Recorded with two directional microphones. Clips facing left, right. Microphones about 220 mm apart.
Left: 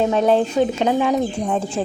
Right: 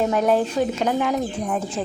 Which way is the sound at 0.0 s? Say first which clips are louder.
Left 3 dB; 25° left (ahead or behind).